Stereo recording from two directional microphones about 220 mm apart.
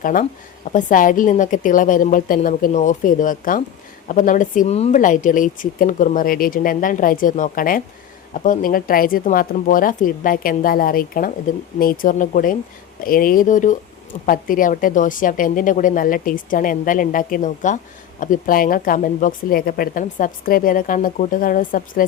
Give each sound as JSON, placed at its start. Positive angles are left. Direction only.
{"t": 0.0, "sound": "a woman's voice", "side_deg": 40}